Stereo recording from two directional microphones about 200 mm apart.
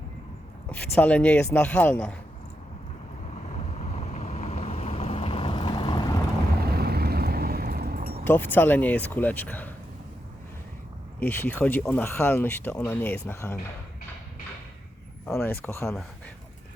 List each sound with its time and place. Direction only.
0.7 s speech: 10° left (ahead or behind)
3.8 s boat: 35° left (ahead or behind)
6.7 s vehicle: 50° right (ahead or behind)
8.2 s speech: 10° left (ahead or behind)
11.2 s speech: 10° left (ahead or behind)
15.3 s speech: 10° left (ahead or behind)